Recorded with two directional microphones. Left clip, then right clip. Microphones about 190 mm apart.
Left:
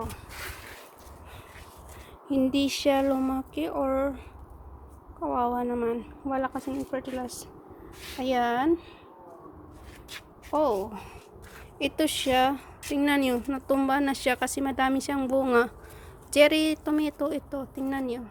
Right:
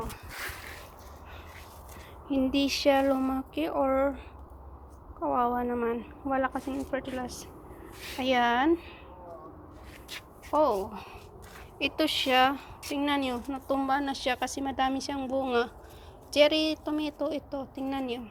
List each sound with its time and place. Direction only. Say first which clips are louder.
0.3 s a sound: right 1 dB; 40° right (ahead or behind)
2.3 s speech: left 2 dB; 25° left (ahead or behind)
5.2 s a woman's voice: even; 15° left (ahead or behind)
10.5 s speech: even; 25° left (ahead or behind)
10.8 s speech: left 1 dB; 35° left (ahead or behind)
13.0 s speech: left 4 dB; 35° left (ahead or behind); by 18.2 s 15° left (ahead or behind)